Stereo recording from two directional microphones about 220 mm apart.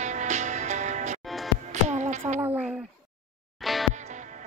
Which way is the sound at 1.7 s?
30° right (ahead or behind).